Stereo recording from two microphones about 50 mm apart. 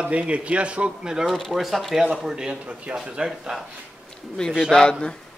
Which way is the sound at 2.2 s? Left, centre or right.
Centre.